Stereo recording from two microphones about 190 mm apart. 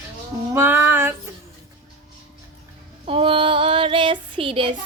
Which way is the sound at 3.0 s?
30° right (ahead or behind).